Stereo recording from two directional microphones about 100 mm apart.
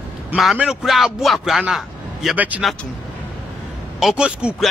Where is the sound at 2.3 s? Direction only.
15° right (ahead or behind).